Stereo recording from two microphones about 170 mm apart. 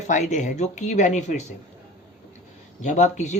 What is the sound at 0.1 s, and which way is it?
Speech, 45° left (ahead or behind).